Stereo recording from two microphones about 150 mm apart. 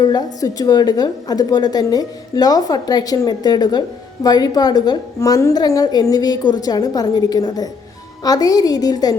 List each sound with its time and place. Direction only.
0.0 s a woman's voice: 25° left (ahead or behind)